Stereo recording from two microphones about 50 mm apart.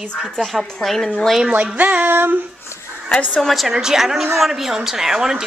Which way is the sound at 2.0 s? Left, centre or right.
Right.